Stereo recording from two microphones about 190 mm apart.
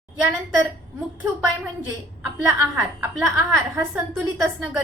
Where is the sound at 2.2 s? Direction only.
5° right (ahead or behind).